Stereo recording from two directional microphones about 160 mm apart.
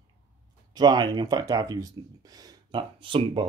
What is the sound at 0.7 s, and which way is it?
Speech, 25° right (ahead or behind).